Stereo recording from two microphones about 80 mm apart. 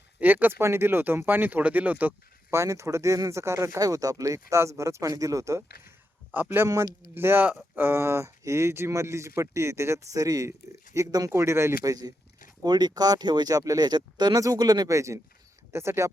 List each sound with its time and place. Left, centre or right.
0.2 s speech: right
2.5 s speech: right
6.3 s speech: right
11.8 s speech: right
14.8 s speech: right